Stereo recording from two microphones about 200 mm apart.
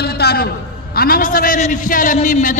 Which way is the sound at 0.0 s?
55° left (ahead or behind).